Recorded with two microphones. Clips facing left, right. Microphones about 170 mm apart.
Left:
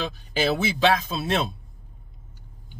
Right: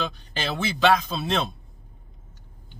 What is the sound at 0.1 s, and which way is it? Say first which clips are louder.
A man's voice: left 7 dB; 5° left (ahead or behind).